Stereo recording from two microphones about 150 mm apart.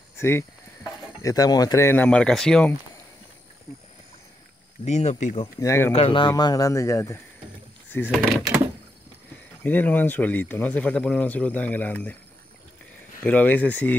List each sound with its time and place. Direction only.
0.2 s speech: 15° left (ahead or behind)
4.8 s speech: 50° left (ahead or behind)
5.6 s speech: 20° left (ahead or behind)
5.9 s speech: 40° left (ahead or behind); by 7.2 s 20° left (ahead or behind)
8.1 s speech: 5° right (ahead or behind)
9.6 s speech: 10° left (ahead or behind)
13.2 s speech: 10° left (ahead or behind)